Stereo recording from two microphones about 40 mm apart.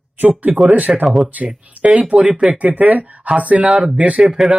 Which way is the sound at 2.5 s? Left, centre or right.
Right.